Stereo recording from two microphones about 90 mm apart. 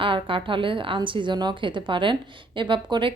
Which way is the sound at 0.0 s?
70° right (ahead or behind).